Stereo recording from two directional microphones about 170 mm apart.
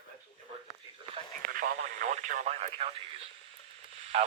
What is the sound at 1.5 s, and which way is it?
Speech, 55° right (ahead or behind).